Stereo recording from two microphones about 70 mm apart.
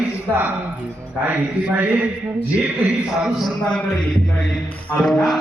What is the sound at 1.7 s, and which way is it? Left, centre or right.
Speech, right.